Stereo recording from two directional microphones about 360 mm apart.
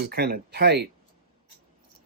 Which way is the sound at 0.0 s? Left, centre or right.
Right.